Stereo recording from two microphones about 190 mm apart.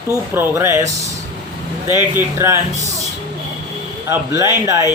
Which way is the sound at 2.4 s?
15° right (ahead or behind).